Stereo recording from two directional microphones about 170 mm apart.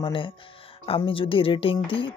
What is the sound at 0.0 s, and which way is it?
Speech, 30° left (ahead or behind).